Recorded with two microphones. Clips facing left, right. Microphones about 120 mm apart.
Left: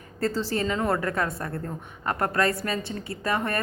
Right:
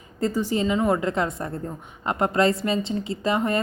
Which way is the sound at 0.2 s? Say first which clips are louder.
Right 3 dB; 15° right (ahead or behind).